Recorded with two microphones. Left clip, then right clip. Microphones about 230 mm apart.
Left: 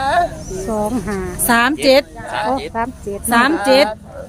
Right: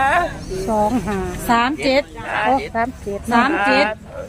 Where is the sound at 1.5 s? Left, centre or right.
Left.